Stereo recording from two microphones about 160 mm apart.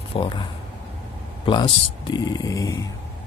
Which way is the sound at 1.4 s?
30° left (ahead or behind).